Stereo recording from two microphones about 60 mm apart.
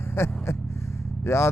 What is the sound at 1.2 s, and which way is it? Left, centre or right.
Speech, left.